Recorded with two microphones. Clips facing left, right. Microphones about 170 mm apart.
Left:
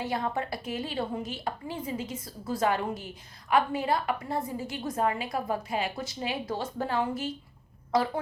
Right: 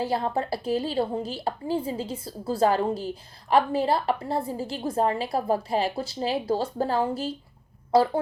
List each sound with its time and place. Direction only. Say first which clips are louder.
0.0 s a woman's voice: right 4 dB; 30° right (ahead or behind)